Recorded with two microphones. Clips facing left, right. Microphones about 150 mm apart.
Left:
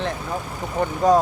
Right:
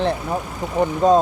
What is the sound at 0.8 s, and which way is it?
Speech, 20° right (ahead or behind).